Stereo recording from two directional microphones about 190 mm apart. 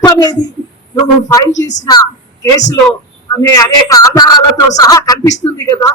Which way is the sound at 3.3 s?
20° left (ahead or behind).